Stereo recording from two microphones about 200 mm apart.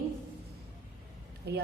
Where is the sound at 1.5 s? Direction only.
55° right (ahead or behind).